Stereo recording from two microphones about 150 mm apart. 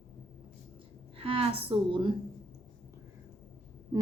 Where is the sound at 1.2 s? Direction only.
40° right (ahead or behind).